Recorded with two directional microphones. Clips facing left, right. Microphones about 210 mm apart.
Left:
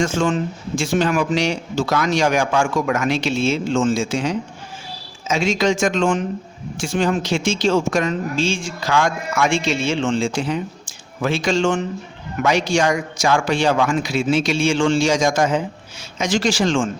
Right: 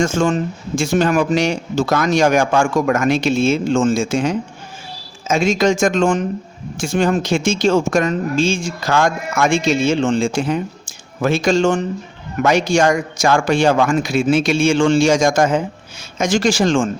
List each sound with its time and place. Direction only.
0.0 s speech: 45° right (ahead or behind)